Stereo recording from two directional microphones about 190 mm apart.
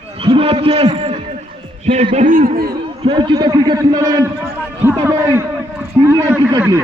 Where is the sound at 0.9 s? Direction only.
35° right (ahead or behind).